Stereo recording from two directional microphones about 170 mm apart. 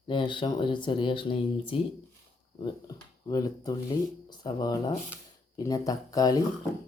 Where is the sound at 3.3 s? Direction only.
20° left (ahead or behind).